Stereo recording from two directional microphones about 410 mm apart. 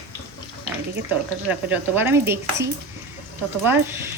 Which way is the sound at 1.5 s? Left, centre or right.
Centre.